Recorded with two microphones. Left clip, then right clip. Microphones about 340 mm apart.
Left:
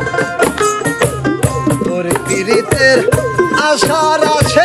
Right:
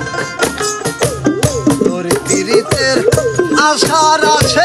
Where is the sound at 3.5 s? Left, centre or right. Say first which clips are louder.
Right 2 dB; centre.